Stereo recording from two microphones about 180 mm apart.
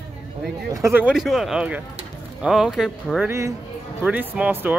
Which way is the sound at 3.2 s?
15° right (ahead or behind).